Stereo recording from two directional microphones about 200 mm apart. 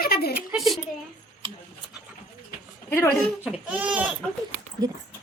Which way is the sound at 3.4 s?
5° right (ahead or behind).